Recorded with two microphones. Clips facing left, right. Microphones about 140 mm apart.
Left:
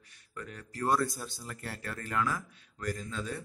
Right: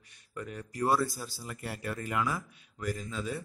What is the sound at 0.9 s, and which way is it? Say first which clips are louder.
A man's voice: even; 5° right (ahead or behind).